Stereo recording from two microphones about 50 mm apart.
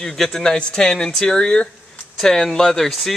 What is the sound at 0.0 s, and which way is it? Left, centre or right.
Speech, centre.